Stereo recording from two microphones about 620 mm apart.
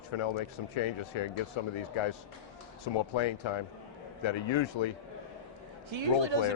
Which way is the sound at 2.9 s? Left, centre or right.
Left.